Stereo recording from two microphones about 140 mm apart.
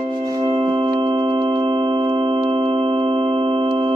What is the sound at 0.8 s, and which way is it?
Music, 35° right (ahead or behind).